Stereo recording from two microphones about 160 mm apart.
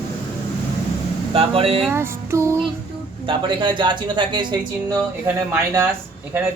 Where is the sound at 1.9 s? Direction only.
15° right (ahead or behind).